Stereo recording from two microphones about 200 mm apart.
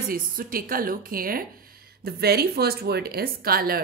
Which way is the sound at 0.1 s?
45° right (ahead or behind).